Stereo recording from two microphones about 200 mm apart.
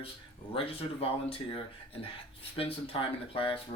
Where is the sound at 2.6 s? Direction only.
30° left (ahead or behind).